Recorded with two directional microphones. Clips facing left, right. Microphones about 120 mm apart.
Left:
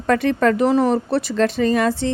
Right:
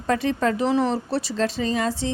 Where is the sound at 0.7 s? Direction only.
50° left (ahead or behind).